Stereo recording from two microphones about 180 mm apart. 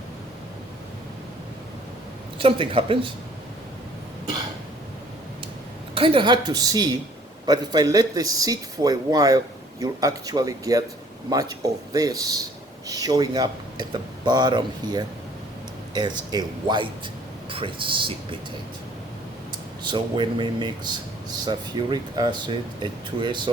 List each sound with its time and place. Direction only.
2.4 s speech: 30° right (ahead or behind)
5.9 s speech: 30° right (ahead or behind)
19.8 s speech: 25° right (ahead or behind)